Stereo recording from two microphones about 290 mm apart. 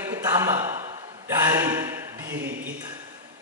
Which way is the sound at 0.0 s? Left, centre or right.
Centre.